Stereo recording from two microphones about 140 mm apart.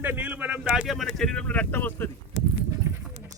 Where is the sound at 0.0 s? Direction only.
10° right (ahead or behind); by 2.0 s 15° left (ahead or behind).